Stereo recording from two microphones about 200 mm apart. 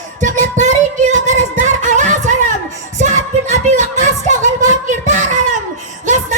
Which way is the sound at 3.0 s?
35° right (ahead or behind).